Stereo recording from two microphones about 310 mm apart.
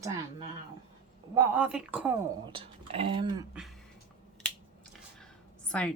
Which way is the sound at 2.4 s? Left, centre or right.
Centre.